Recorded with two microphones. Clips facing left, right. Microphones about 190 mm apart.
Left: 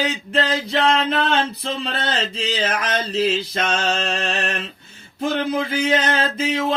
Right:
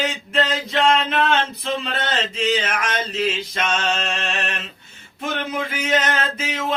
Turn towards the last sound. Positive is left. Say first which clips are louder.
# left 4 dB
turn(degrees=30)  # may be behind; listen again after turning